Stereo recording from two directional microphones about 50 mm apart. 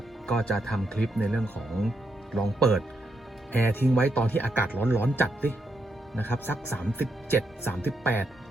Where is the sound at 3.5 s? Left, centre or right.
Left.